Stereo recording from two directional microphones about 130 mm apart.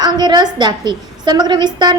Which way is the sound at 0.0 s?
35° right (ahead or behind).